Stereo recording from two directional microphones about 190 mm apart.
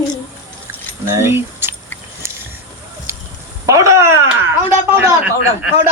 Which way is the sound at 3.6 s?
15° right (ahead or behind).